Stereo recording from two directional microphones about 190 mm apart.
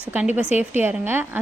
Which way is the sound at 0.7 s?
10° right (ahead or behind).